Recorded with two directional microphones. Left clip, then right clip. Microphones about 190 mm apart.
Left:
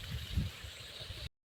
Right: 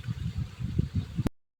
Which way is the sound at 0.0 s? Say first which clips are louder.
Right 1 dB; 55° right (ahead or behind).